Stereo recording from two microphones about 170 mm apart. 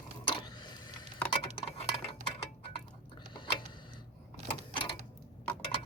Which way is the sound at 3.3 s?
30° left (ahead or behind).